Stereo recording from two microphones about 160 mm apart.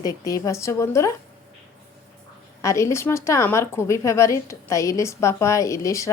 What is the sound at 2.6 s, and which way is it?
A woman's voice, 20° left (ahead or behind).